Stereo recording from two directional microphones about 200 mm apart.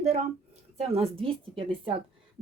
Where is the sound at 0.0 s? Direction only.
35° right (ahead or behind).